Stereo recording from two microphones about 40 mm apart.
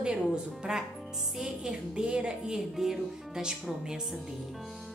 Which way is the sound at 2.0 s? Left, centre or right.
Right.